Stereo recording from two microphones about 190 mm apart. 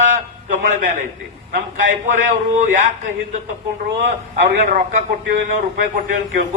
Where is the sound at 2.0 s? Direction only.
40° right (ahead or behind).